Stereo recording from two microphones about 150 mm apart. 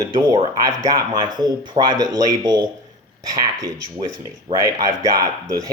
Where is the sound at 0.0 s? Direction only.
25° right (ahead or behind).